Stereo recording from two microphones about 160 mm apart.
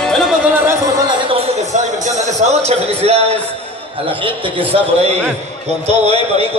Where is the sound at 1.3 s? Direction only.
40° right (ahead or behind).